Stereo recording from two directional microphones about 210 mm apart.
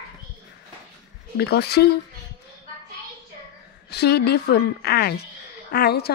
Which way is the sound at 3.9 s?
50° left (ahead or behind).